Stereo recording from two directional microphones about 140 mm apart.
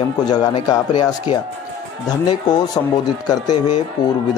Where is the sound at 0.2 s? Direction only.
30° left (ahead or behind).